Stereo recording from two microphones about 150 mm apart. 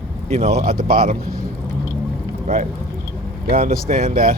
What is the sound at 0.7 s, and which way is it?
Speech, 75° right (ahead or behind).